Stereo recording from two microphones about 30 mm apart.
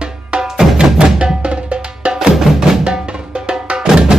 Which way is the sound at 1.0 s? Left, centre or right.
Right.